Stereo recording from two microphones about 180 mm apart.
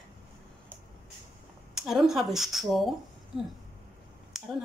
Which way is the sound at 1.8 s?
Centre (ahead or behind).